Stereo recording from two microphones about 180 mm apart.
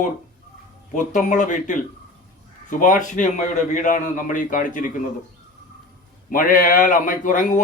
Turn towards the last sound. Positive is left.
turn(degrees=45)  # may be behind; listen again after turning